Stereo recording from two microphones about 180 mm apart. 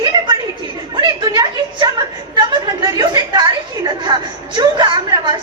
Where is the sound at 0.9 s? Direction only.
25° right (ahead or behind).